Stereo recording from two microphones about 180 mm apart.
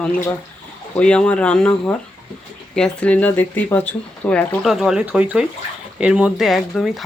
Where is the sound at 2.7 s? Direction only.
5° left (ahead or behind).